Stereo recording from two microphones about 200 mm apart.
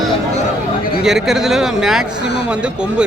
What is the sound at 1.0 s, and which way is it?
Speech, centre (ahead or behind).